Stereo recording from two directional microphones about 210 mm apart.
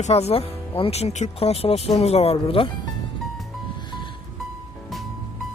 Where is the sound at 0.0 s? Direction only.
30° left (ahead or behind).